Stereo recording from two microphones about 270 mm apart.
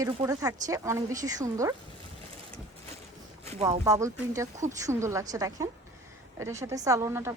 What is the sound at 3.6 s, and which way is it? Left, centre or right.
A woman's voice, centre.